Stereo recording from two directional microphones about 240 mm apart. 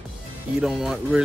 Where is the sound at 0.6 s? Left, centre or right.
Centre.